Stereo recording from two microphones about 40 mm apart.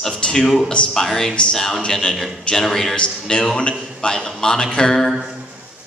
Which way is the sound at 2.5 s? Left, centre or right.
Centre.